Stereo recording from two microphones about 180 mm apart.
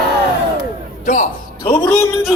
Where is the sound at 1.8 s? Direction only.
15° left (ahead or behind).